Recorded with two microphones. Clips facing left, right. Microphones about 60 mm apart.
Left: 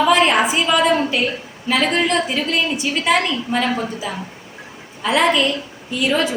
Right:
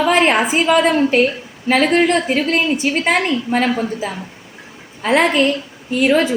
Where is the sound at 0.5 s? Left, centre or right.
Right.